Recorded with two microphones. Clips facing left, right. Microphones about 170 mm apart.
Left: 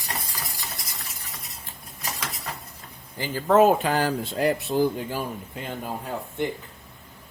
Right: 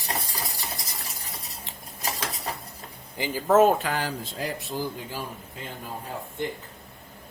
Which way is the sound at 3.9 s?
55° left (ahead or behind).